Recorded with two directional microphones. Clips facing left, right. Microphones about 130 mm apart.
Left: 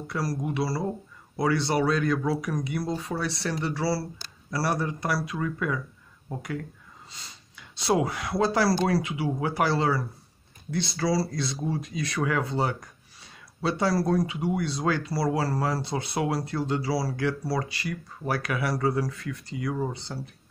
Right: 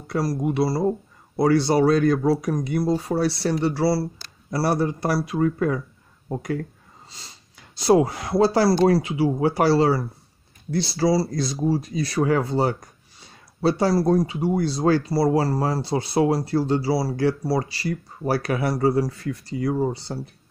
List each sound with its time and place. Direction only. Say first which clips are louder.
0.0 s speech: right 6 dB; 30° right (ahead or behind)